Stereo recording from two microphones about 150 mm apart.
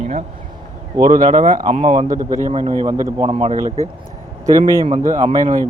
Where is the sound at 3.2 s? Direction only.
40° right (ahead or behind).